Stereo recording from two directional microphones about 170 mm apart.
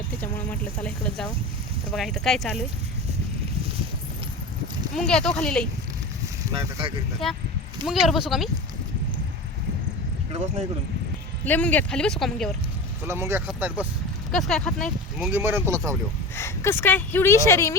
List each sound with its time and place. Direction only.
0.2 s speech: 10° left (ahead or behind)
4.9 s speech: 5° left (ahead or behind)
6.5 s speech: 30° right (ahead or behind)
7.9 s speech: centre (ahead or behind)
11.4 s speech: 10° left (ahead or behind)
13.1 s speech: 15° right (ahead or behind); by 15.3 s 5° left (ahead or behind)
15.3 s speech: 10° right (ahead or behind)
16.3 s speech: 15° left (ahead or behind)